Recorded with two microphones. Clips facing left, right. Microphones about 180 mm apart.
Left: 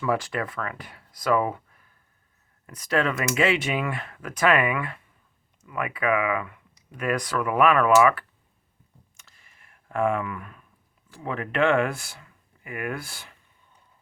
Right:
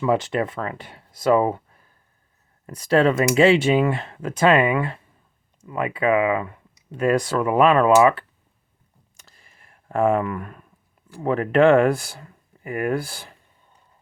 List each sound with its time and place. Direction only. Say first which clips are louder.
0.0 s speech: right 5 dB; 25° right (ahead or behind)
9.1 s clicking: right 4 dB; 35° right (ahead or behind)
11.2 s speech: right 8 dB; 40° right (ahead or behind)